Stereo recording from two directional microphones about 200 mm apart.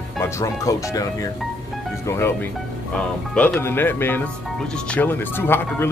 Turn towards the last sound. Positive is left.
turn(degrees=10)  # may be behind; listen again after turning